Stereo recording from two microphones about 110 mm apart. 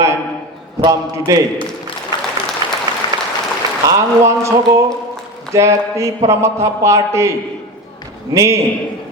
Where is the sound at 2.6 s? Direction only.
40° right (ahead or behind).